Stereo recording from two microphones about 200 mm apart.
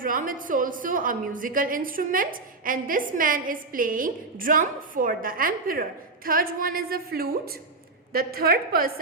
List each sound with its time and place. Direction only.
0.0 s a woman's voice: 45° right (ahead or behind)